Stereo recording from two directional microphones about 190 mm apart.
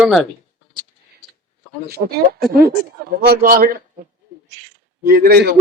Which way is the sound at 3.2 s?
50° right (ahead or behind).